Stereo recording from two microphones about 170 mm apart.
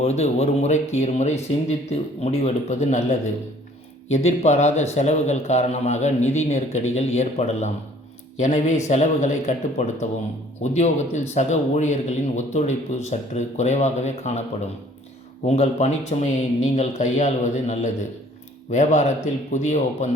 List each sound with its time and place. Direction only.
0.0 s a man's voice: 40° left (ahead or behind)
15.4 s speech: 40° left (ahead or behind)